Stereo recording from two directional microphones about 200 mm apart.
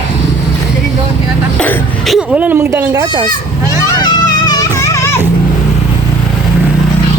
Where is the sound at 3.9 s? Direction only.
20° left (ahead or behind).